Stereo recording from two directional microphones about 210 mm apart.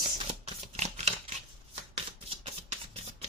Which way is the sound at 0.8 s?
30° right (ahead or behind).